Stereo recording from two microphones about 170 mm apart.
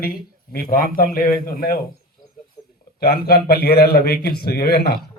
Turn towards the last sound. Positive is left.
turn(degrees=65)  # may be behind; listen again after turning